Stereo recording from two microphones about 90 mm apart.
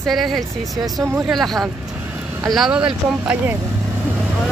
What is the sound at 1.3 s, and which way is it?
Speech, centre (ahead or behind).